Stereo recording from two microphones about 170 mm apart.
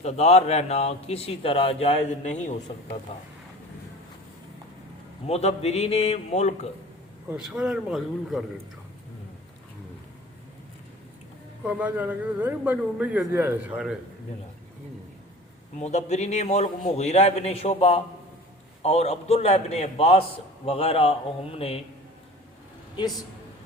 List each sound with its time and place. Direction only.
0.0 s a man's voice: 40° left (ahead or behind)
5.2 s a man's voice: 40° left (ahead or behind)
7.3 s a man's voice: 5° right (ahead or behind)
11.6 s a man's voice: 10° right (ahead or behind)
15.8 s a man's voice: 40° left (ahead or behind)